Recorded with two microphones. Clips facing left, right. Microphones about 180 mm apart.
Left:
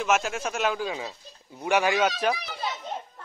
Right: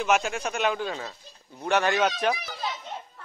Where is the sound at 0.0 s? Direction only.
Centre (ahead or behind).